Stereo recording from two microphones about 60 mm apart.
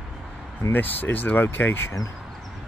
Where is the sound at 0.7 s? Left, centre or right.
Left.